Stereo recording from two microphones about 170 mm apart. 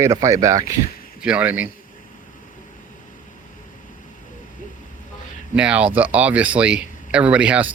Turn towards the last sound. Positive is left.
turn(degrees=-5)  # may be behind; listen again after turning